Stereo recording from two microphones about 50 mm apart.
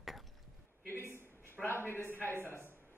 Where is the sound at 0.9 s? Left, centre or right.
Left.